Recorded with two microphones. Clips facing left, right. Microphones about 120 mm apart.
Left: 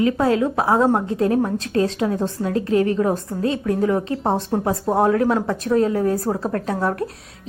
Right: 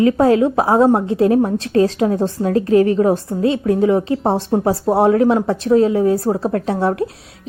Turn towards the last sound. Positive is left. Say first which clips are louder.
# right 4 dB
turn(degrees=-30)  # may be behind; listen again after turning